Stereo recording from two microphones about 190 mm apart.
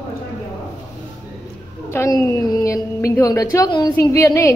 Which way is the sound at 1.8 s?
15° left (ahead or behind).